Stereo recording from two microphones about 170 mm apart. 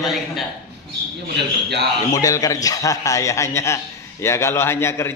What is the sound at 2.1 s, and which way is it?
A man's voice, 20° left (ahead or behind).